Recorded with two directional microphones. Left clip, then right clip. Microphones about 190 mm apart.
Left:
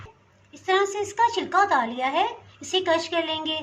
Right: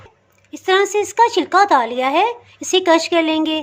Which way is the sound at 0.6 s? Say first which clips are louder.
Right 7 dB; 60° right (ahead or behind).